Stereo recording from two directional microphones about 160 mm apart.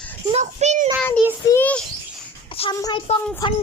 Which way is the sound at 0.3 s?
45° right (ahead or behind).